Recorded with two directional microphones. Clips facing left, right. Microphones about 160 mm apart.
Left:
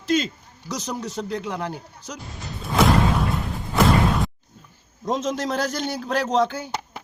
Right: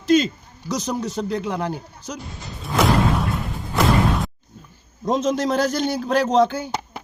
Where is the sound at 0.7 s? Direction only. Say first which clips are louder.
Right 5 dB; 25° right (ahead or behind).